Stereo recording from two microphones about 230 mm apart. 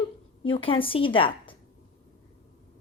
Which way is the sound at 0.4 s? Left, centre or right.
Left.